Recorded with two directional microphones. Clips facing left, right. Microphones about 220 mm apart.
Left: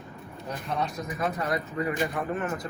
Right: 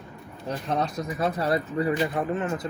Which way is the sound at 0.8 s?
35° right (ahead or behind).